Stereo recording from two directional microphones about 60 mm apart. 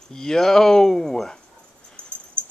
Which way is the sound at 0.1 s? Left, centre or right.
Centre.